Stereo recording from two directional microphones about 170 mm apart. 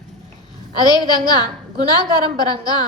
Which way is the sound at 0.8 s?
25° left (ahead or behind).